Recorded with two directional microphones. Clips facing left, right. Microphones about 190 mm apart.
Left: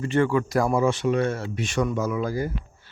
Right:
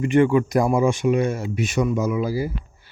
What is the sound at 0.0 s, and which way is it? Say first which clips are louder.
Speech: right 5 dB; 15° right (ahead or behind).